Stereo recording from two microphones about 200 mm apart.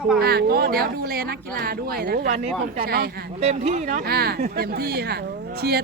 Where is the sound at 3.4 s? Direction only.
35° right (ahead or behind).